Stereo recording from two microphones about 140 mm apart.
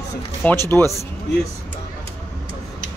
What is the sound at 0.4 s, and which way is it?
Speech, 15° left (ahead or behind).